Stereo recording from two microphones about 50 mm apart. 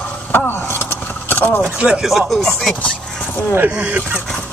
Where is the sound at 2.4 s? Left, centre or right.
Centre.